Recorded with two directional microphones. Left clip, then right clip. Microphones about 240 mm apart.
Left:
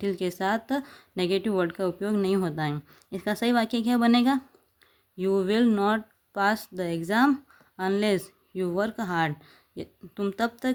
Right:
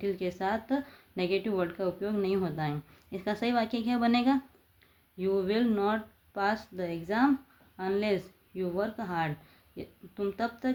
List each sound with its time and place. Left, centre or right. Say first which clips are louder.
0.0 s speech: left 4 dB; left